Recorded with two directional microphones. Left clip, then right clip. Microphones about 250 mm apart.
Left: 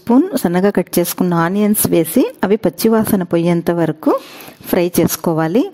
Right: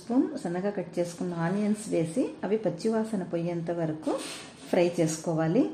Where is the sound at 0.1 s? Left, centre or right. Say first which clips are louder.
Left 15 dB; left.